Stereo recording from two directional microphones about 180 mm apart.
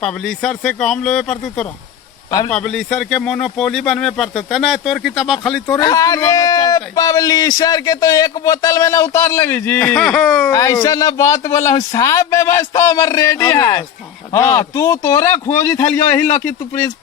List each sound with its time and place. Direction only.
0.0 s speech: centre (ahead or behind)
5.8 s a man's voice: 20° left (ahead or behind)
10.0 s speech: centre (ahead or behind)
10.5 s speech: 20° left (ahead or behind)